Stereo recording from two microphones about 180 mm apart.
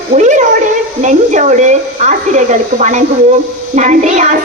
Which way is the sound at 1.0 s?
40° right (ahead or behind).